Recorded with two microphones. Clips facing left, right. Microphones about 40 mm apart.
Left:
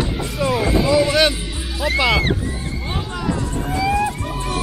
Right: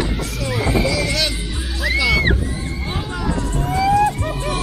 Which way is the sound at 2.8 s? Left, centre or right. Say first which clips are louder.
Left 1 dB; centre.